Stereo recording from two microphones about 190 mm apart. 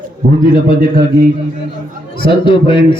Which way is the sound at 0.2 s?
45° right (ahead or behind).